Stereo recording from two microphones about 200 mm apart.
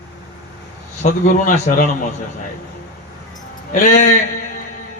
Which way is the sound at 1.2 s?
40° left (ahead or behind).